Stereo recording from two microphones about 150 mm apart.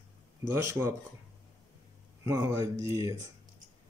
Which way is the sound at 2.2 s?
20° right (ahead or behind).